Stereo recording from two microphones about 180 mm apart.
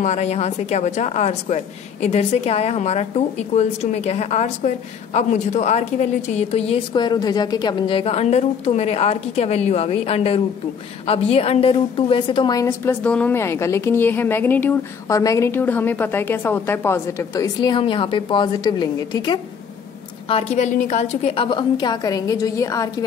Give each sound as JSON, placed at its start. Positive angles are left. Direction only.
{"t": 0.0, "sound": "a woman's voice", "side_deg": 40}
{"t": 6.9, "sound": "a woman's voice", "side_deg": 25}
{"t": 20.2, "sound": "a woman's voice", "side_deg": 35}